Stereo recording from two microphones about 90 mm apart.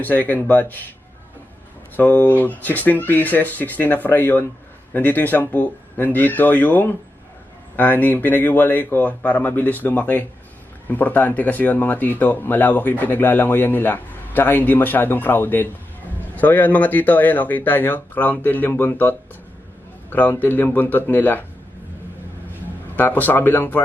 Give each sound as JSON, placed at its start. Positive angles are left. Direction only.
{"t": 0.0, "sound": "speech", "side_deg": 20}
{"t": 2.0, "sound": "a man's voice", "side_deg": 20}
{"t": 23.0, "sound": "speech", "side_deg": 20}